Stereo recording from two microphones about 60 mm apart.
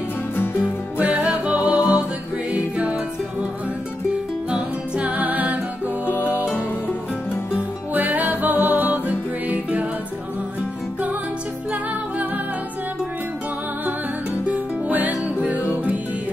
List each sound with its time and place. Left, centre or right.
0.9 s music: right
4.5 s music: centre
6.0 s music: left
7.9 s music: right
14.4 s music: right